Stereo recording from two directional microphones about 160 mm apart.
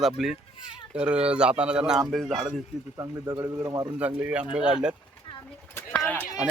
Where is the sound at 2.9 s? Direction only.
20° right (ahead or behind).